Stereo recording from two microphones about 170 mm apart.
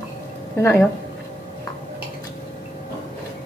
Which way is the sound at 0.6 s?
15° left (ahead or behind).